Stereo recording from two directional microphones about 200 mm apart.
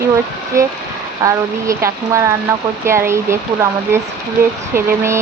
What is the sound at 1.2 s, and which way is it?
Speech, 15° right (ahead or behind).